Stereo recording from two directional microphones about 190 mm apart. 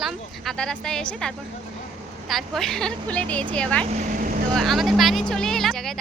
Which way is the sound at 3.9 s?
45° right (ahead or behind).